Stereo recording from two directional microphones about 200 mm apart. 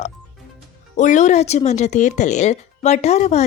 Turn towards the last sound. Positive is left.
turn(degrees=35)  # may be behind; listen again after turning